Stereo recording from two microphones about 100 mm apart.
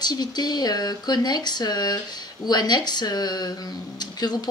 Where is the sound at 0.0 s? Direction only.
45° left (ahead or behind).